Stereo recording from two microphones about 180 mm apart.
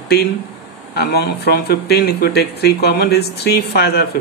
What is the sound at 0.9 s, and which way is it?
Speech, 60° left (ahead or behind).